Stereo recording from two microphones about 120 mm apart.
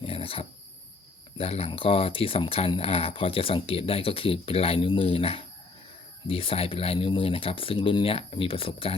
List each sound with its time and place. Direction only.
0.0 s wild animals: 50° left (ahead or behind)
1.4 s speech: 55° left (ahead or behind)